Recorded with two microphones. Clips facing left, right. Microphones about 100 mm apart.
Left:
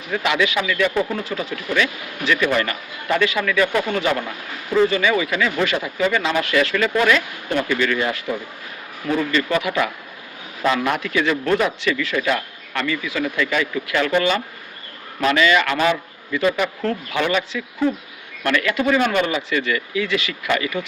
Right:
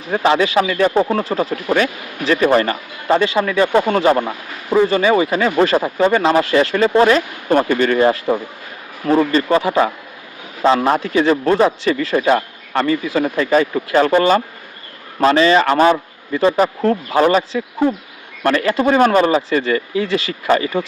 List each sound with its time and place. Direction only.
0.0 s a man's voice: 35° right (ahead or behind)